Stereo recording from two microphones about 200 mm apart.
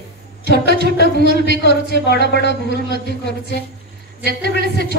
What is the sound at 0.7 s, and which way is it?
Speech, 50° right (ahead or behind).